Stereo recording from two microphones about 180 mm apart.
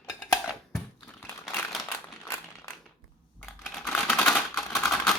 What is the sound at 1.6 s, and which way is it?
Crumpling, 5° left (ahead or behind).